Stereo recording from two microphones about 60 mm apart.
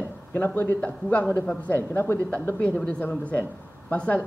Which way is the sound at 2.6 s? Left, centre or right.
Centre.